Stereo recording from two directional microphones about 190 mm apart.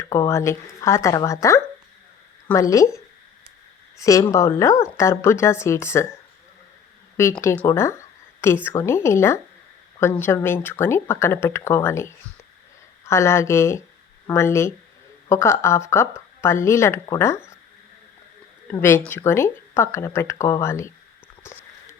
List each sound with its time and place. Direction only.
0.0 s speech: 15° left (ahead or behind)
3.9 s speech: 15° left (ahead or behind)
7.2 s speech: 15° left (ahead or behind)
18.7 s speech: 15° left (ahead or behind)